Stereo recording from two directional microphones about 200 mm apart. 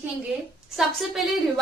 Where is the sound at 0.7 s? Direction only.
Centre (ahead or behind).